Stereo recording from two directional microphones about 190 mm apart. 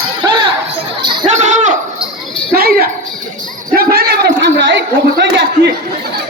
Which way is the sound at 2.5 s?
55° right (ahead or behind).